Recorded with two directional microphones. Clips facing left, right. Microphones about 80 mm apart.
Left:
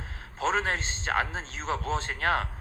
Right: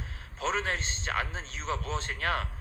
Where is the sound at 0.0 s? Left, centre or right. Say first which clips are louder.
Left 4 dB; left.